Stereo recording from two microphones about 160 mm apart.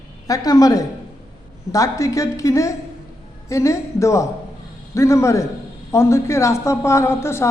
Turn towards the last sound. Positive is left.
turn(degrees=15)  # may be behind; listen again after turning